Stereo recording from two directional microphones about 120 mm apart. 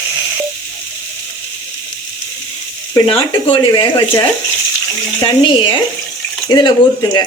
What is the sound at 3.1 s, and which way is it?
Speech, 50° left (ahead or behind).